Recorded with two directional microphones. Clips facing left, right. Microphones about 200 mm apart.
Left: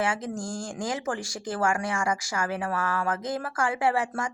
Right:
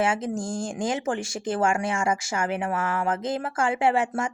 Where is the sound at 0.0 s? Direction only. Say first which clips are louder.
Right 4 dB; 25° right (ahead or behind).